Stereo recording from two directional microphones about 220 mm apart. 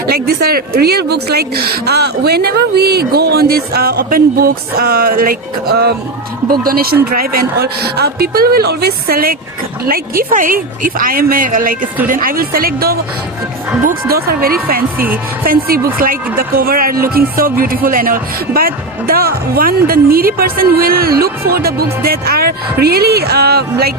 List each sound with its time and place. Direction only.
0.1 s speech: 45° right (ahead or behind)
14.9 s speech: 10° right (ahead or behind)
15.4 s speech: 40° right (ahead or behind)